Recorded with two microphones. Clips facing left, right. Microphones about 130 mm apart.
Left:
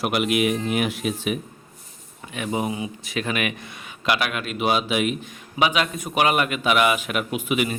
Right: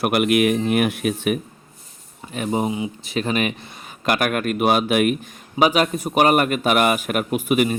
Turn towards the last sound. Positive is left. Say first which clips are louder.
# right 5 dB
turn(degrees=-45)  # may be behind; listen again after turning